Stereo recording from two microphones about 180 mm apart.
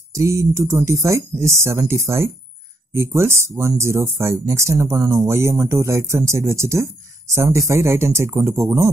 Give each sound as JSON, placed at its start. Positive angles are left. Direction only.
{"t": 0.1, "sound": "speech", "side_deg": -15}